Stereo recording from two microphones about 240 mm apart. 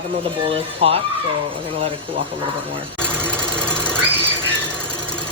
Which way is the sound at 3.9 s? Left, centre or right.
Centre.